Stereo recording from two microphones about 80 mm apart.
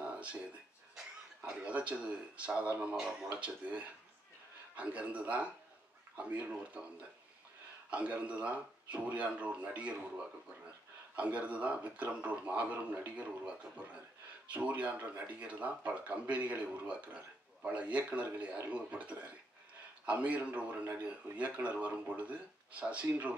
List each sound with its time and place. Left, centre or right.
0.0 s music: centre
0.9 s speech: centre
7.9 s speech: centre